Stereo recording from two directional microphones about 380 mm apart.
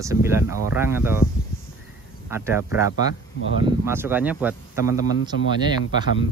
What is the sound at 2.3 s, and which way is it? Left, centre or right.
Speech, centre.